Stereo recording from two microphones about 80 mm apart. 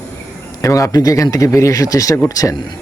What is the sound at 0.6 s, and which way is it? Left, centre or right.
Speech, left.